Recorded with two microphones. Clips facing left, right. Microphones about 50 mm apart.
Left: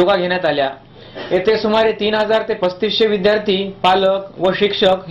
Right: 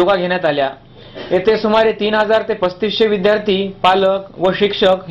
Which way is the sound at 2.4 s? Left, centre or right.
Centre.